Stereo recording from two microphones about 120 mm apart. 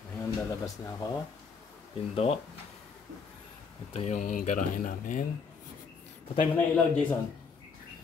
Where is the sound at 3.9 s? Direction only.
65° left (ahead or behind); by 5.3 s 90° left.